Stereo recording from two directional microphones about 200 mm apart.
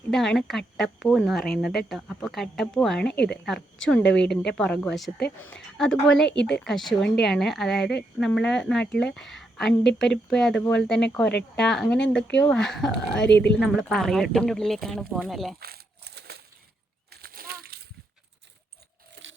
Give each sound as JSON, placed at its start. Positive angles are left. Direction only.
{"t": 0.1, "sound": "a woman's voice", "side_deg": 0}
{"t": 13.2, "sound": "speech", "side_deg": 60}
{"t": 13.6, "sound": "a woman's voice", "side_deg": 0}
{"t": 15.6, "sound": "crushing", "side_deg": -50}
{"t": 17.1, "sound": "a sound", "side_deg": -50}